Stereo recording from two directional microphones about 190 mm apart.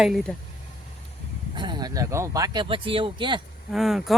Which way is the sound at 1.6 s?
25° right (ahead or behind).